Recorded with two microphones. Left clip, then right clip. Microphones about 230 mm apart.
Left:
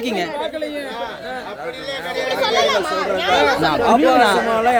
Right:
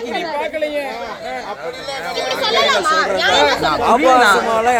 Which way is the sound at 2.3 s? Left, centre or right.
Centre.